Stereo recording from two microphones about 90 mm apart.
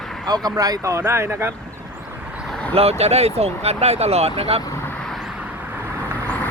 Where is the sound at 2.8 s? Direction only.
90° right.